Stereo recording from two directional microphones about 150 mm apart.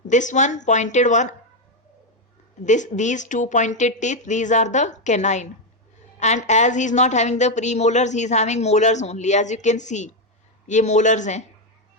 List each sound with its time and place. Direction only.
0.1 s a woman's voice: 55° left (ahead or behind)
2.6 s a woman's voice: 55° left (ahead or behind)